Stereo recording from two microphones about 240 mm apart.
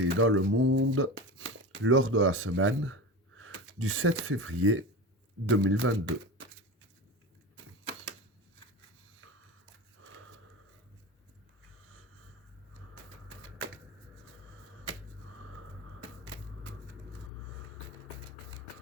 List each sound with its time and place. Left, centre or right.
0.0 s a man's voice: right